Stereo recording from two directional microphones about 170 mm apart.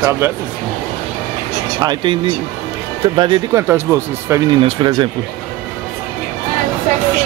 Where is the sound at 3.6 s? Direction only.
15° right (ahead or behind).